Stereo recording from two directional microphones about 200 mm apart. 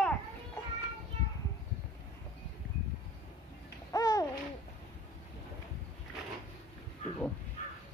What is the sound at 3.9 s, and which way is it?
Babbling, 20° left (ahead or behind).